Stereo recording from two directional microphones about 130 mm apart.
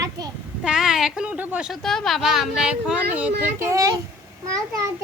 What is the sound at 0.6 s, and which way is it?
Speech, 5° right (ahead or behind).